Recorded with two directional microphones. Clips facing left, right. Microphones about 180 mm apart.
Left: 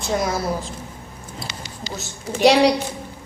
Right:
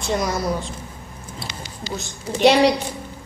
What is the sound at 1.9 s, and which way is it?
Speech, centre (ahead or behind).